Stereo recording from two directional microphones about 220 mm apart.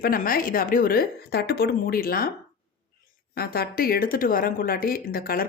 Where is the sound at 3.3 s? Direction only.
45° left (ahead or behind).